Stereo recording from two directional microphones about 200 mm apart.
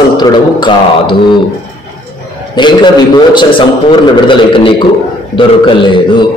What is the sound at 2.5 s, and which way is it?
A man's voice, 20° left (ahead or behind).